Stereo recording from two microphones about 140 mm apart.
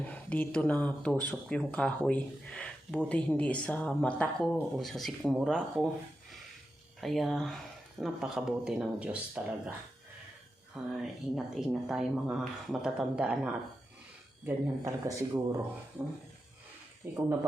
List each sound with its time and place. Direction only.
0.0 s speech: 10° left (ahead or behind)
7.0 s speech: centre (ahead or behind)
10.9 s speech: 5° right (ahead or behind)
14.4 s speech: 25° right (ahead or behind)
17.0 s speech: 20° right (ahead or behind)